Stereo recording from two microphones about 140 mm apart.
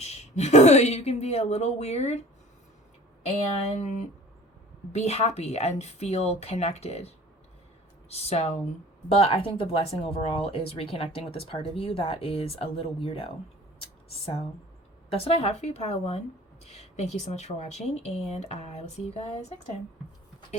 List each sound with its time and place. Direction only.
0.0 s speech: 50° left (ahead or behind)
3.2 s speech: 50° left (ahead or behind)
8.1 s speech: 50° left (ahead or behind)
15.1 s speech: 45° left (ahead or behind)